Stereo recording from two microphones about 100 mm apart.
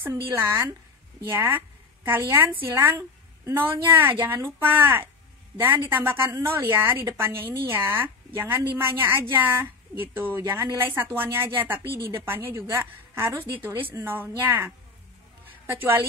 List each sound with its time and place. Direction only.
0.0 s a woman's voice: 25° right (ahead or behind)